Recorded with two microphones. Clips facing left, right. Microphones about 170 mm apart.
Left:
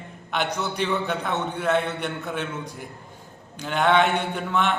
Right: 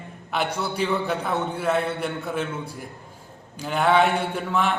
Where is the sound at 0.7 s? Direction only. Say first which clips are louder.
Right 2 dB; 5° right (ahead or behind).